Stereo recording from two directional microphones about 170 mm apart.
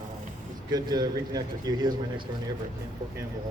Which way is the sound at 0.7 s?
25° right (ahead or behind).